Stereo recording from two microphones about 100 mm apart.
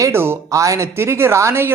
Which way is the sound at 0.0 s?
25° right (ahead or behind).